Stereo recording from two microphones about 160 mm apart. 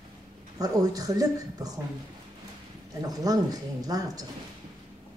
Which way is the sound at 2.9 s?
25° right (ahead or behind).